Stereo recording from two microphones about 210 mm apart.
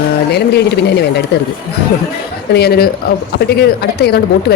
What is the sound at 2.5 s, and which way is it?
Speech, 50° left (ahead or behind).